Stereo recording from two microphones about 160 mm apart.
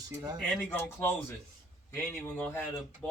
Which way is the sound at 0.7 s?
15° left (ahead or behind).